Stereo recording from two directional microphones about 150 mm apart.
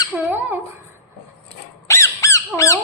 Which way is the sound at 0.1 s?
Centre (ahead or behind).